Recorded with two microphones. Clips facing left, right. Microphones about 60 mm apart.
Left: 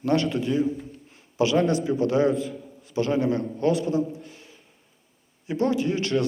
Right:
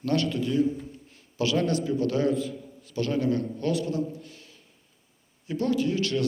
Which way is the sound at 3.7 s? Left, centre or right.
Centre.